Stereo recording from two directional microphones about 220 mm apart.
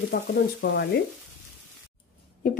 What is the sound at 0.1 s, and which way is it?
Speech, 40° left (ahead or behind).